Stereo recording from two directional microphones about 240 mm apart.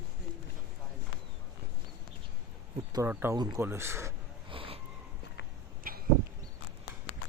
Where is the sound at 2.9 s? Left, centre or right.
Centre.